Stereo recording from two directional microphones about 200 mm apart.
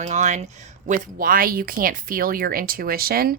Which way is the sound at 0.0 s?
35° right (ahead or behind).